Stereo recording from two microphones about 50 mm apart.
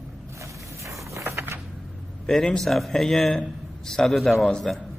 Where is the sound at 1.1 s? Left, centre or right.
Right.